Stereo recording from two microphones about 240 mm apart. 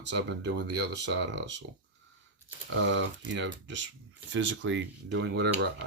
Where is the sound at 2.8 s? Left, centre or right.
Right.